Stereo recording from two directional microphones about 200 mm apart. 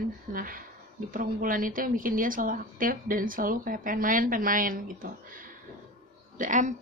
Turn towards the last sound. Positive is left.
turn(degrees=-40)  # may be behind; listen again after turning